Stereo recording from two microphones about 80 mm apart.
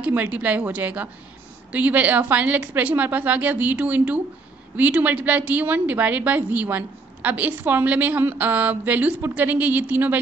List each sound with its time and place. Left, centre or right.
0.0 s a woman's voice: right